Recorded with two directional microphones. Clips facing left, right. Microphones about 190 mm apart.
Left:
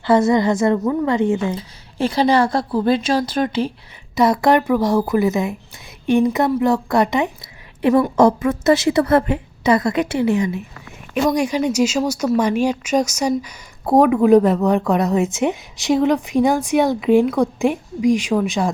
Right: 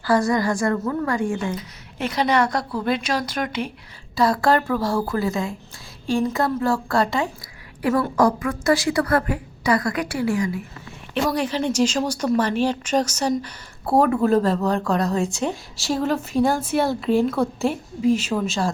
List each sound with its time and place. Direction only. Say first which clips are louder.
0.0 s a woman's voice: left 5 dB; 20° left (ahead or behind)
11.1 s speech: left 5 dB; 10° left (ahead or behind)